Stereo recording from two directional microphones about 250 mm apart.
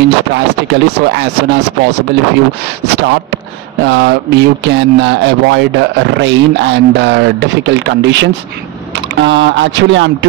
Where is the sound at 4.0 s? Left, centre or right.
Right.